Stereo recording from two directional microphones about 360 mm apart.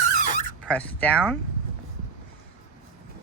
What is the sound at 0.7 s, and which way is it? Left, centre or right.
Speech, centre.